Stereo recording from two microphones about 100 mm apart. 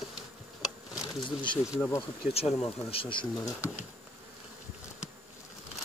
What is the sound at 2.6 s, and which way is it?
Speech, 65° left (ahead or behind).